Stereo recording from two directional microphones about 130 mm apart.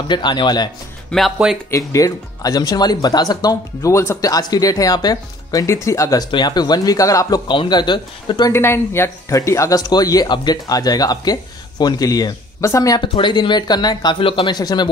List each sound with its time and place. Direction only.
0.1 s speech: 35° left (ahead or behind)
1.1 s speech: centre (ahead or behind)
1.7 s speech: 25° left (ahead or behind)
8.5 s speech: 20° left (ahead or behind)
13.0 s speech: 40° left (ahead or behind)
14.6 s speech: 30° left (ahead or behind)